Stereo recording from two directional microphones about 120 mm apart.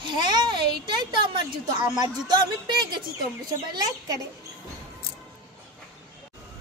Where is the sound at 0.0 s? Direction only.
40° right (ahead or behind).